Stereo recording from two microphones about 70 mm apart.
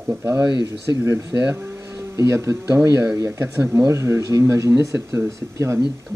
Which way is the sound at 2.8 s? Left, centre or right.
Right.